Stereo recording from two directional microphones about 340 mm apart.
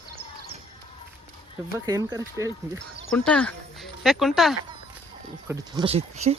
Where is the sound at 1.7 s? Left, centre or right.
Centre.